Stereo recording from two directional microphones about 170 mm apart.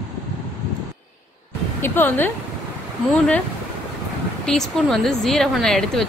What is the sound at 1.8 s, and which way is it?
A woman's voice, 10° left (ahead or behind).